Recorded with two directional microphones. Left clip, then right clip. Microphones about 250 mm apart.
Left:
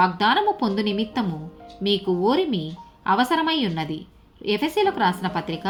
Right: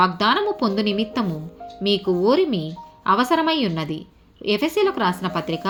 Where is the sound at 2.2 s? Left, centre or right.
Centre.